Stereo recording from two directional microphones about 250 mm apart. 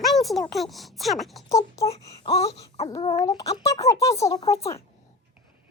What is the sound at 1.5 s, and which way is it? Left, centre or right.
Speech, centre.